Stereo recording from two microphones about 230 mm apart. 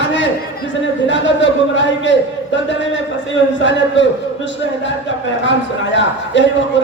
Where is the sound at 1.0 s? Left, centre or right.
Left.